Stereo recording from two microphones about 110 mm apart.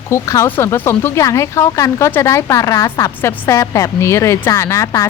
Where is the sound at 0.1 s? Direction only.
25° left (ahead or behind).